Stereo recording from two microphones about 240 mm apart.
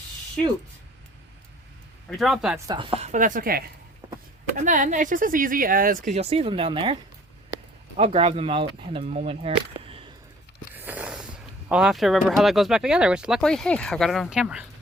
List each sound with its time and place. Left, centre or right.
2.0 s speech: centre
2.6 s speech: right
4.0 s a sound: centre
4.5 s speech: right
7.9 s speech: right
10.8 s snort: centre
11.7 s speech: centre